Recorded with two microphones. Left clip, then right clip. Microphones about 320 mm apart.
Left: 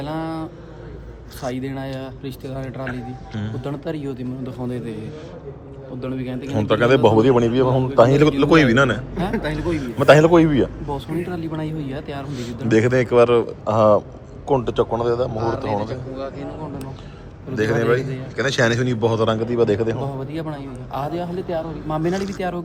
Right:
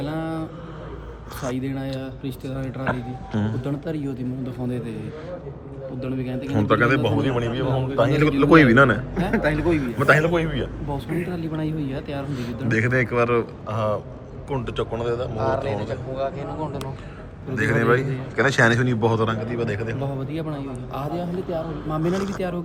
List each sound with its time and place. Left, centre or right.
0.0 s a man's voice: centre
6.0 s a man's voice: centre
15.4 s speech: right
17.5 s a man's voice: centre